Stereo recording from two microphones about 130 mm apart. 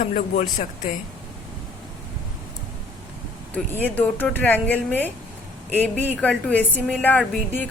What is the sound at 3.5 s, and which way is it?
A woman's voice, 10° left (ahead or behind).